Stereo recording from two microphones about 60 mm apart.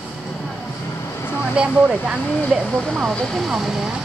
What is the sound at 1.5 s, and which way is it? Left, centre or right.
Speech, centre.